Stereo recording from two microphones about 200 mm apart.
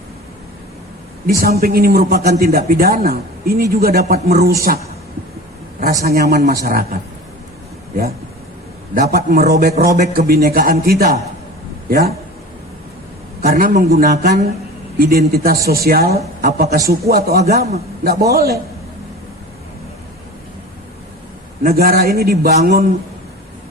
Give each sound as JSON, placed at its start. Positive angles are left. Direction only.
{"t": 1.4, "sound": "a man's voice", "side_deg": -50}
{"t": 5.8, "sound": "a man's voice", "side_deg": -50}
{"t": 9.0, "sound": "a man's voice", "side_deg": -50}
{"t": 13.4, "sound": "a man's voice", "side_deg": -45}
{"t": 21.6, "sound": "a man's voice", "side_deg": -50}